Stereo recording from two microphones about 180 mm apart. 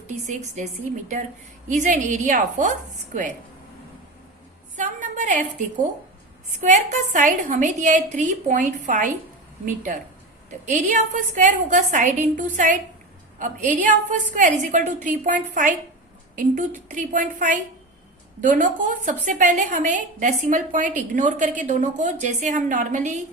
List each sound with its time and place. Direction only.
0.3 s a woman's voice: 40° right (ahead or behind)
4.8 s a sound: 45° right (ahead or behind)
6.6 s a woman's voice: 40° right (ahead or behind)